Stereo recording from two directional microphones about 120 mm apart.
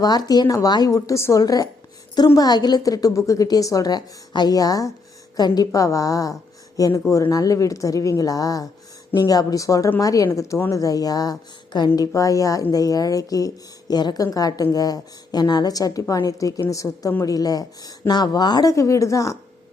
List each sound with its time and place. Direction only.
0.0 s a woman's voice: 35° left (ahead or behind)